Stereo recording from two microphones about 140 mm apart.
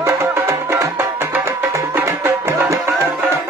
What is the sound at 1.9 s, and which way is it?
Music, 20° right (ahead or behind).